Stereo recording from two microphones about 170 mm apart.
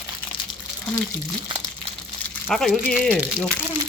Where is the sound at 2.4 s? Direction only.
Centre (ahead or behind).